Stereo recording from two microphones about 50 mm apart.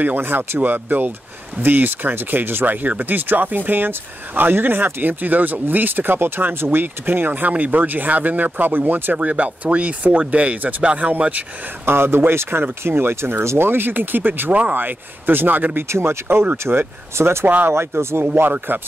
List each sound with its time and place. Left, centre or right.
0.0 s speech: right
9.1 s speech: right
11.8 s speech: right
14.5 s speech: right
14.8 s speech: right
15.9 s speech: right
17.5 s speech: right
17.7 s speech: right
18.7 s speech: right